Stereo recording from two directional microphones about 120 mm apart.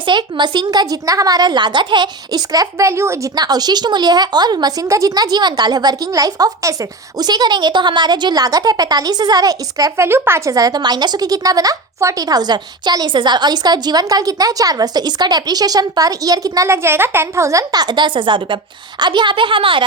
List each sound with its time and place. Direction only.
0.0 s a woman's voice: 40° right (ahead or behind); by 3.2 s 25° right (ahead or behind)
3.3 s a woman's voice: 35° right (ahead or behind)